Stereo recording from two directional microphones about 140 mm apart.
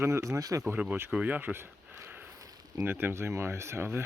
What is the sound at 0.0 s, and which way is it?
Speech, 20° right (ahead or behind).